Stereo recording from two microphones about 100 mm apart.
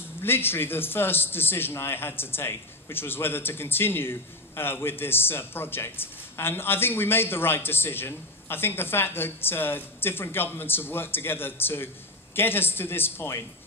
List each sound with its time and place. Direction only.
0.2 s a man's voice: 20° left (ahead or behind)